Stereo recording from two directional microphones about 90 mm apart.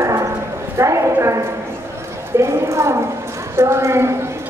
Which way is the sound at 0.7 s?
35° right (ahead or behind).